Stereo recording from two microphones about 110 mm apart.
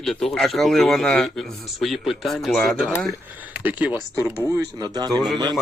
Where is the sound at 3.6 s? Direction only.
15° right (ahead or behind).